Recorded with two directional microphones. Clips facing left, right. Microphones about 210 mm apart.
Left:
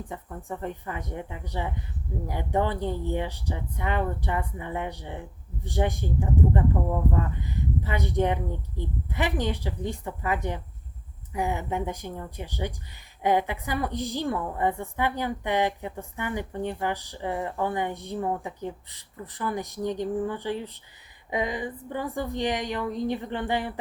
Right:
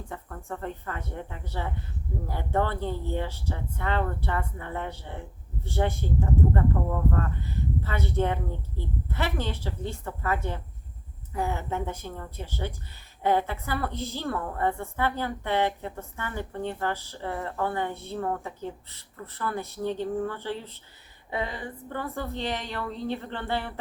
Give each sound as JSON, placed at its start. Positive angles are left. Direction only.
{"t": 0.1, "sound": "a woman's voice", "side_deg": 15}